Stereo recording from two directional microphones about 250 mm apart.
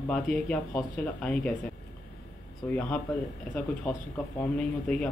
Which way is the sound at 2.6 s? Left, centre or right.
Centre.